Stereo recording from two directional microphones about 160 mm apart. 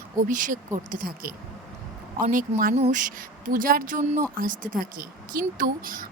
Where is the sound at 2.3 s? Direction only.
60° right (ahead or behind).